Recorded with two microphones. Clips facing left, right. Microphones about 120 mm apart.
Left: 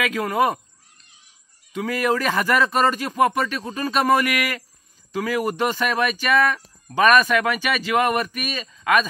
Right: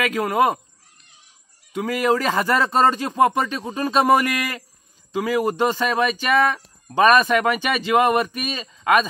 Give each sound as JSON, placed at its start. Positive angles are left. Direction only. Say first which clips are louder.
{"t": 0.1, "sound": "bird", "louder": "right 2 dB", "side_deg": -10}
{"t": 1.8, "sound": "speech", "louder": "right 2 dB", "side_deg": -15}